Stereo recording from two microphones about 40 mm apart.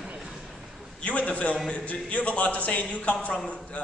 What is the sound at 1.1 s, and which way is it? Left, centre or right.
A man's voice, left.